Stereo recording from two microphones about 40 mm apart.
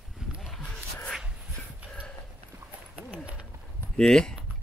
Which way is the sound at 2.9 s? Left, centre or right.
Right.